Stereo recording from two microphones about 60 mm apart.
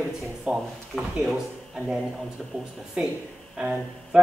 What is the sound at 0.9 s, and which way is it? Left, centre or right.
Speech, centre.